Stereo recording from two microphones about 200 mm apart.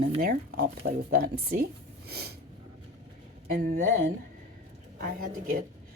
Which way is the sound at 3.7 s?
40° right (ahead or behind).